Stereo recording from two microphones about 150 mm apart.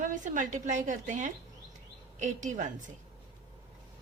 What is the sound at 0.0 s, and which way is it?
A woman's voice, 60° right (ahead or behind).